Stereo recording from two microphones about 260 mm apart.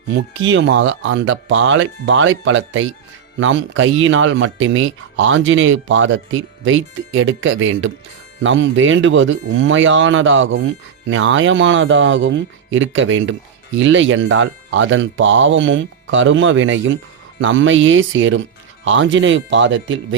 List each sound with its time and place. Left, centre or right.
0.4 s speech: right